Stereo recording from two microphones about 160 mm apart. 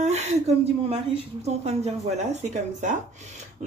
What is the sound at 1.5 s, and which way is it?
Speech, 40° right (ahead or behind).